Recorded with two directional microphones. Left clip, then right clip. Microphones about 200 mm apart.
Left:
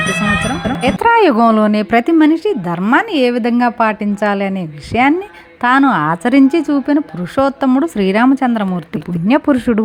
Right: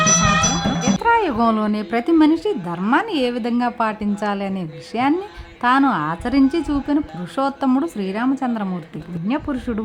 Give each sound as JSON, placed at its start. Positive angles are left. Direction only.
{"t": 0.0, "sound": "speech", "side_deg": 25}